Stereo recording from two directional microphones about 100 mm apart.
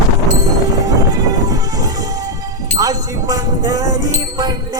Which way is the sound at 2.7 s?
35° right (ahead or behind).